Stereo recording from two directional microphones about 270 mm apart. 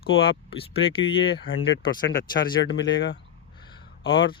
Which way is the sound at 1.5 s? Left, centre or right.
Left.